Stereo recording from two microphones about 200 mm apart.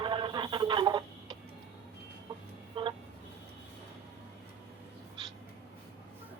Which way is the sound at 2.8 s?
25° right (ahead or behind).